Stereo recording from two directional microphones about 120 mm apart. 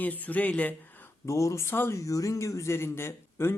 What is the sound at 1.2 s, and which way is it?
Speech, 25° left (ahead or behind).